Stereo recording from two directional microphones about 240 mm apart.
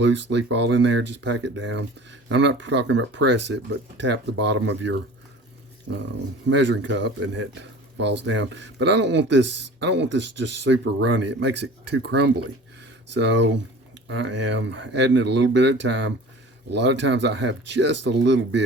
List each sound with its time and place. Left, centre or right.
0.0 s speech: right
6.5 s speech: right